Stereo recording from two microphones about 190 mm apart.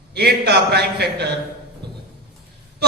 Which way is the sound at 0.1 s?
60° right (ahead or behind).